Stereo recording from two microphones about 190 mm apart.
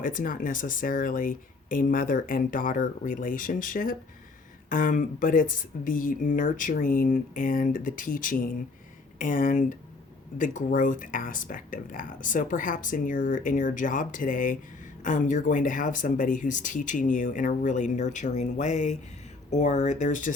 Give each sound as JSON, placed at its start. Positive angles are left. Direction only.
{"t": 0.0, "sound": "speech", "side_deg": 45}